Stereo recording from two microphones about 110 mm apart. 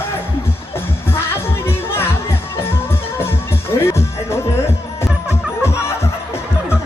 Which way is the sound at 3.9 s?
25° left (ahead or behind).